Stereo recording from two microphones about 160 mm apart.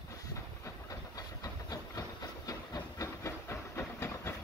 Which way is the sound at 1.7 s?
25° left (ahead or behind).